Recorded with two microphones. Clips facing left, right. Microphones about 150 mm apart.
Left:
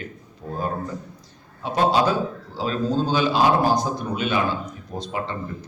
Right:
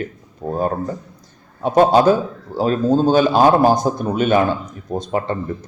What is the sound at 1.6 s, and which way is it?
A man's voice, 50° right (ahead or behind).